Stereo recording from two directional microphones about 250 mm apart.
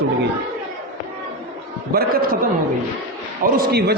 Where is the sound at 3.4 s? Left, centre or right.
Right.